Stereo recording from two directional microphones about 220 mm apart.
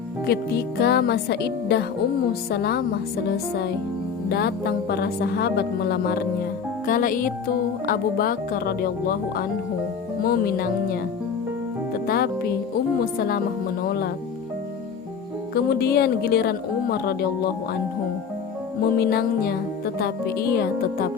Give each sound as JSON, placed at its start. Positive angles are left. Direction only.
{"t": 0.3, "sound": "a woman's voice", "side_deg": 45}
{"t": 12.0, "sound": "music", "side_deg": 45}
{"t": 13.1, "sound": "a woman's voice", "side_deg": 45}
{"t": 15.5, "sound": "a woman's voice", "side_deg": 45}
{"t": 18.8, "sound": "a woman's voice", "side_deg": 45}